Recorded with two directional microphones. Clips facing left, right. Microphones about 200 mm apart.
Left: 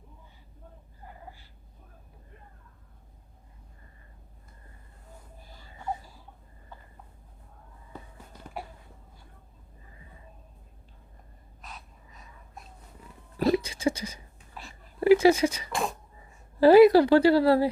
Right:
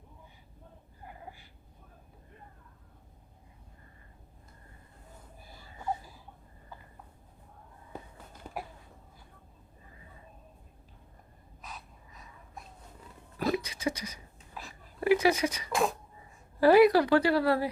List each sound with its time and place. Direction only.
13.5 s a sound: 30° left (ahead or behind)
15.7 s speech: centre (ahead or behind)
16.6 s speech: 25° left (ahead or behind)